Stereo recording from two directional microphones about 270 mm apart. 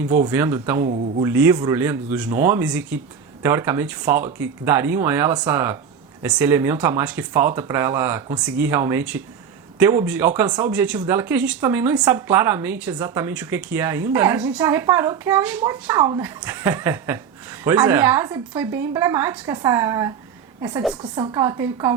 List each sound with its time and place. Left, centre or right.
0.1 s speech: centre
0.9 s speech: right
1.2 s a woman's voice: centre